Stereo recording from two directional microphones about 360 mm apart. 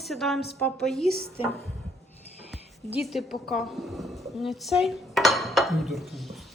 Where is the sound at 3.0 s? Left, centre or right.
Centre.